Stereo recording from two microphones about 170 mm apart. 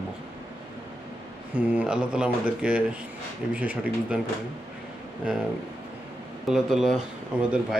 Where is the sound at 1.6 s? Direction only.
5° right (ahead or behind).